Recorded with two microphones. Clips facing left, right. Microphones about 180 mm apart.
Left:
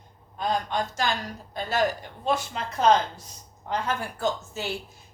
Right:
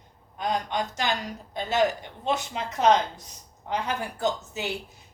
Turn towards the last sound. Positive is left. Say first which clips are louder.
# even
turn(degrees=-20)  # may be behind; listen again after turning